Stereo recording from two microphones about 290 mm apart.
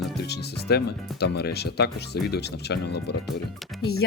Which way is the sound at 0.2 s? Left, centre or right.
Left.